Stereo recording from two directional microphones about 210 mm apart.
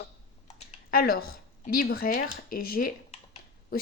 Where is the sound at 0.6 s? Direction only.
45° left (ahead or behind).